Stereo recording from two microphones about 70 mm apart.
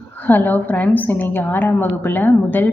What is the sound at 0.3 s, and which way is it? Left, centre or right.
A woman's voice, left.